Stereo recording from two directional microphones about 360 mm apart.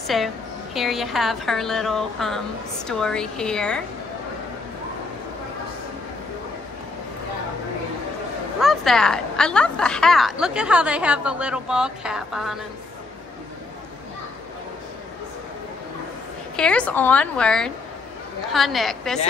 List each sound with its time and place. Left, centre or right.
0.0 s a woman's voice: centre
8.5 s a woman's voice: centre
16.5 s a woman's voice: centre